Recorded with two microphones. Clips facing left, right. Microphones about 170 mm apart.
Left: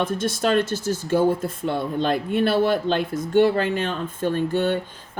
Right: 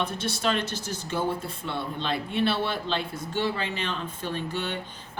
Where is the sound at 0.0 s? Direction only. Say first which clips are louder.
Left 5 dB; 50° left (ahead or behind).